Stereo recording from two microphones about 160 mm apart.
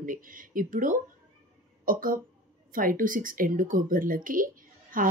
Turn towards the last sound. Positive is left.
turn(degrees=-60)  # may be behind; listen again after turning